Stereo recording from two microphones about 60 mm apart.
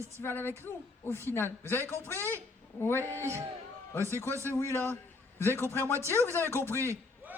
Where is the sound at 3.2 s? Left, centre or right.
Right.